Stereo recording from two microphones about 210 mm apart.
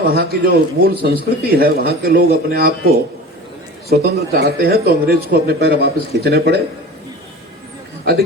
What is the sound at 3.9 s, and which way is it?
A man's voice, 45° right (ahead or behind).